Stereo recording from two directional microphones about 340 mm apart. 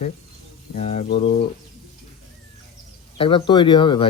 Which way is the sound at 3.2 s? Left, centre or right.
Centre.